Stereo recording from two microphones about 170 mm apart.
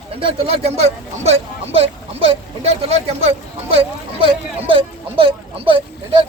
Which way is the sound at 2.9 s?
35° right (ahead or behind).